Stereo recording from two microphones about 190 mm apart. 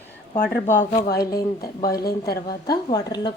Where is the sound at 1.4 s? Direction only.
20° left (ahead or behind).